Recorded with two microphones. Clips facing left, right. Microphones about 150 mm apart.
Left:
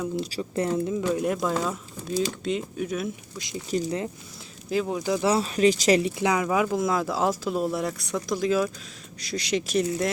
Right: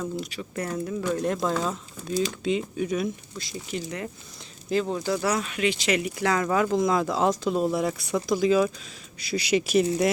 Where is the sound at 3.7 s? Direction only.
30° left (ahead or behind).